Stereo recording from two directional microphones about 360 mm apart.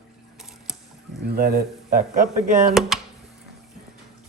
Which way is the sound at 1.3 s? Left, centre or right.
Right.